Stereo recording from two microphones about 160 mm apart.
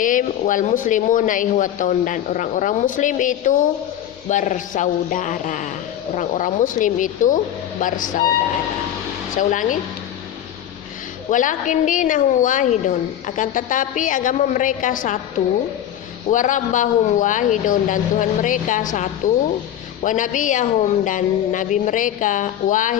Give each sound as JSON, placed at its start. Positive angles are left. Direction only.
{"t": 0.0, "sound": "a woman's voice", "side_deg": 55}
{"t": 9.3, "sound": "a woman's voice", "side_deg": 55}
{"t": 11.3, "sound": "a woman's voice", "side_deg": 55}
{"t": 16.3, "sound": "a woman's voice", "side_deg": 55}